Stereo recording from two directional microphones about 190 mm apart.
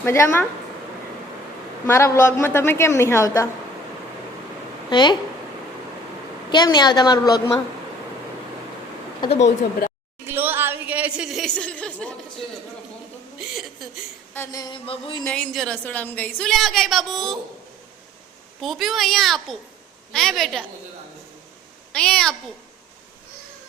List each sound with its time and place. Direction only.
0.0 s a woman's voice: 10° left (ahead or behind)
1.9 s a woman's voice: 15° left (ahead or behind)
4.9 s a woman's voice: 25° left (ahead or behind)
6.5 s a woman's voice: 25° left (ahead or behind)
9.2 s speech: 35° left (ahead or behind)
10.3 s a sound: 10° right (ahead or behind); by 12.1 s 5° left (ahead or behind)
14.3 s a woman's voice: 15° left (ahead or behind)
15.2 s a woman's voice: 5° left (ahead or behind)
18.6 s a woman's voice: centre (ahead or behind)
21.9 s a woman's voice: 5° left (ahead or behind)